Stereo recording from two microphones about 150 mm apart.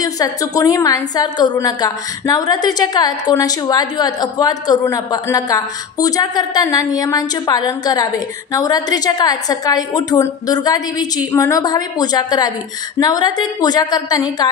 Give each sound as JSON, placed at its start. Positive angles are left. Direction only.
{"t": 0.0, "sound": "a woman's voice", "side_deg": 25}